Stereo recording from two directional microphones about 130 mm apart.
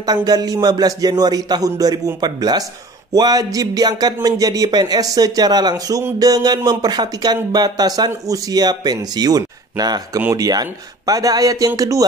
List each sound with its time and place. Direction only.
0.0 s speech: 30° right (ahead or behind)